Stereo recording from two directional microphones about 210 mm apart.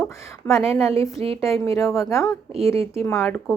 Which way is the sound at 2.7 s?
30° right (ahead or behind).